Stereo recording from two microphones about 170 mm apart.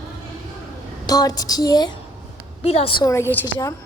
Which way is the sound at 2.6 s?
35° left (ahead or behind).